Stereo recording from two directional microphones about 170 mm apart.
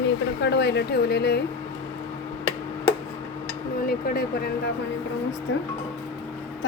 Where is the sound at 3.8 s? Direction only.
60° left (ahead or behind).